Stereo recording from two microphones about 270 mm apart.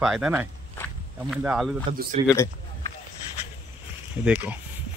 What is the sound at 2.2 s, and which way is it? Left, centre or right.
Speech, centre.